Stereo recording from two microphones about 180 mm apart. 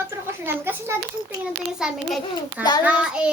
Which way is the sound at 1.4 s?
5° right (ahead or behind).